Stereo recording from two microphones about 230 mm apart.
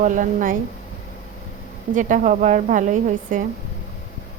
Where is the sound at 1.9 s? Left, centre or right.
Right.